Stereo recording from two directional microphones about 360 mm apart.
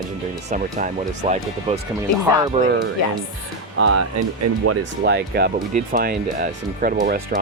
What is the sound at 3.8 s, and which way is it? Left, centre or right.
Speech, right.